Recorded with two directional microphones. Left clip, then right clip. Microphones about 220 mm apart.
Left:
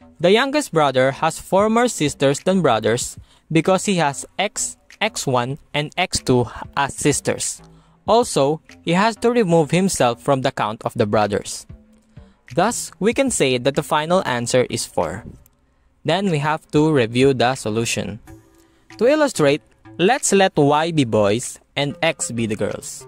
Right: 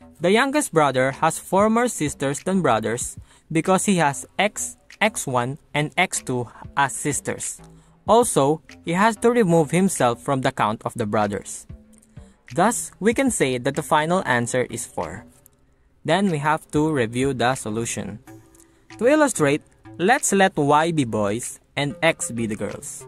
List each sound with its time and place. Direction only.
0.2 s speech: 45° left (ahead or behind)
12.5 s speech: 40° left (ahead or behind)
16.1 s speech: 45° left (ahead or behind)